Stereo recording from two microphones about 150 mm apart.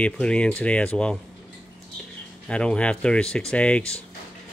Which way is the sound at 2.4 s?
5° left (ahead or behind).